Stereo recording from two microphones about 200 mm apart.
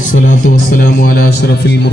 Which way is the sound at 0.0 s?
40° left (ahead or behind).